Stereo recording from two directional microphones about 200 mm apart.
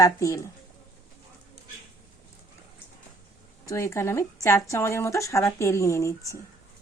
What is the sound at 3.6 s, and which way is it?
Speech, 15° left (ahead or behind).